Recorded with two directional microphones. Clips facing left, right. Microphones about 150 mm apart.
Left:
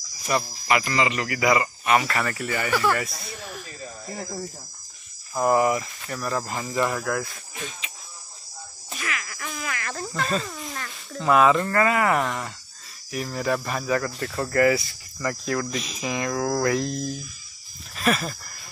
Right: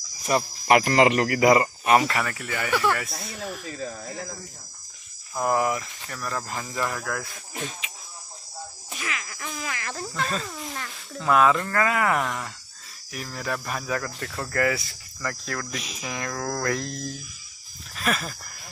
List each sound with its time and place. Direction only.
0.3 s speech: 35° right (ahead or behind)
0.7 s speech: 55° right (ahead or behind); by 2.0 s 35° right (ahead or behind)
2.2 s speech: centre (ahead or behind)
5.3 s speech: 5° left (ahead or behind)
8.9 s insect: 20° right (ahead or behind)
10.2 s speech: centre (ahead or behind)
17.9 s a sound: centre (ahead or behind)